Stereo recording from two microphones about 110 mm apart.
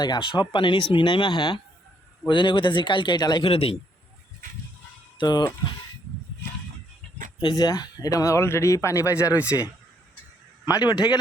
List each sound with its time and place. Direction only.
0.0 s speech: 40° left (ahead or behind)
3.5 s a man's voice: 60° left (ahead or behind)
5.1 s speech: 40° left (ahead or behind)
7.4 s speech: 35° left (ahead or behind)
10.7 s a man's voice: 35° left (ahead or behind)